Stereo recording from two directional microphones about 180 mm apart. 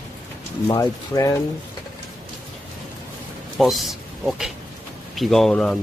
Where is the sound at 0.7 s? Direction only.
20° left (ahead or behind).